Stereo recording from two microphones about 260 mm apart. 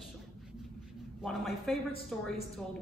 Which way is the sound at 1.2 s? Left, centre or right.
Centre.